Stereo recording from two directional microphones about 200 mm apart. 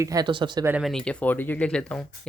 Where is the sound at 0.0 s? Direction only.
20° right (ahead or behind).